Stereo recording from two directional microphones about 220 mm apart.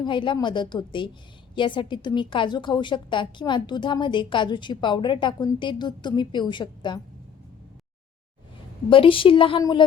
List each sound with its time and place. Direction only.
0.0 s a woman's voice: 20° left (ahead or behind)
8.9 s a woman's voice: 25° left (ahead or behind)